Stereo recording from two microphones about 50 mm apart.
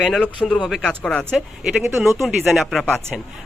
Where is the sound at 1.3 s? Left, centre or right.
Centre.